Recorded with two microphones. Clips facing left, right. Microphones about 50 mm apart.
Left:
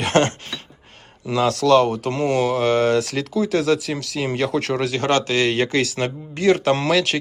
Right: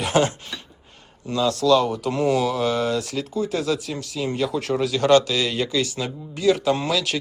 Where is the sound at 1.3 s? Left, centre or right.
Left.